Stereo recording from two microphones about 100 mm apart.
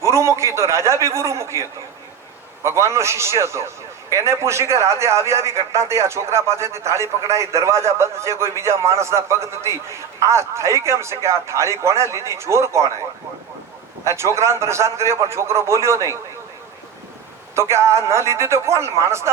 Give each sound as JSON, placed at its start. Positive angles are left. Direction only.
{"t": 0.0, "sound": "a man's voice", "side_deg": -30}
{"t": 14.0, "sound": "a man's voice", "side_deg": -30}
{"t": 17.5, "sound": "a man's voice", "side_deg": -25}